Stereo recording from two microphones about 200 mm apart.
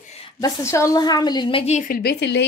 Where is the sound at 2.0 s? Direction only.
60° left (ahead or behind).